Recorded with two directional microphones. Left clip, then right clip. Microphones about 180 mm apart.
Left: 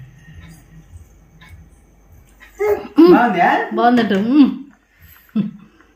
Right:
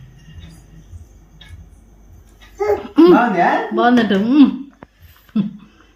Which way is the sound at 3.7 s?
5° left (ahead or behind).